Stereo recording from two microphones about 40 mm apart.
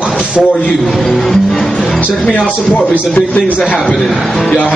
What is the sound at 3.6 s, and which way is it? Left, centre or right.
Speech, centre.